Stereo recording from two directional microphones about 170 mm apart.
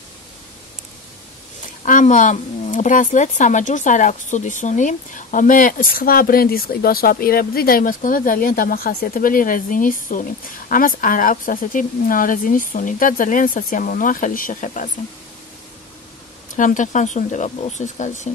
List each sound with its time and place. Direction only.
1.9 s speech: 50° left (ahead or behind)
16.5 s speech: 50° left (ahead or behind)